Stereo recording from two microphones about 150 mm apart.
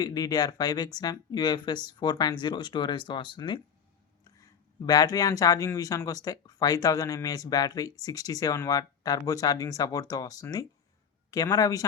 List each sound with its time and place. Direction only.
0.0 s speech: 25° left (ahead or behind)
4.9 s speech: 25° left (ahead or behind)